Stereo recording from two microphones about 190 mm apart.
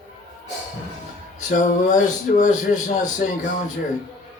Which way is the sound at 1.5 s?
40° left (ahead or behind).